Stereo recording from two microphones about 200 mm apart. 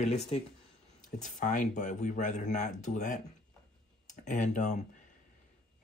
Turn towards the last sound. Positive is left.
turn(degrees=35)  # may be behind; listen again after turning